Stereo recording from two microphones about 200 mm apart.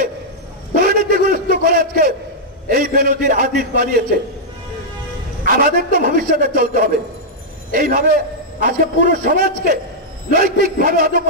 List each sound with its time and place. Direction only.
0.7 s a sound: 45° right (ahead or behind)
2.7 s a man's voice: 45° right (ahead or behind)
5.4 s a man's voice: 45° right (ahead or behind)